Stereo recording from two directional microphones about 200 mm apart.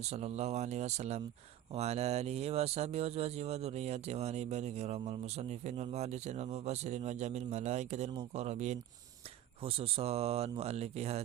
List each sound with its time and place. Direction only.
0.0 s speech: 30° right (ahead or behind)